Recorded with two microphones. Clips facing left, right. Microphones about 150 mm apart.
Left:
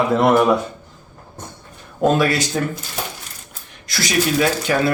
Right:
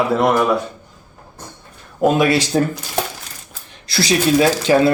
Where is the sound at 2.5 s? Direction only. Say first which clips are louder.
Right 5 dB; 40° right (ahead or behind).